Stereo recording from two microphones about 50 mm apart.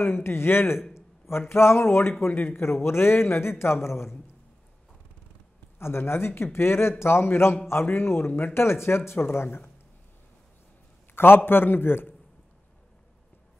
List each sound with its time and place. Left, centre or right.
0.0 s a man's voice: left
0.9 s a sound: left
1.5 s a man's voice: left
5.8 s a man's voice: left
11.1 s a man's voice: left